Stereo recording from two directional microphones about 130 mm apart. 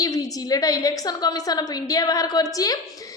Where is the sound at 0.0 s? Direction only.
25° left (ahead or behind).